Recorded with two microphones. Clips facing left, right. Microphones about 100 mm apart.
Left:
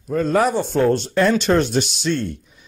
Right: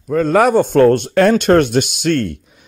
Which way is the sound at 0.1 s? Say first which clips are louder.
Right 6 dB; 75° right (ahead or behind).